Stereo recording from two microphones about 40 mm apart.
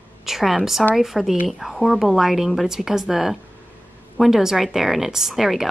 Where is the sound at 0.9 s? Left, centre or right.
Centre.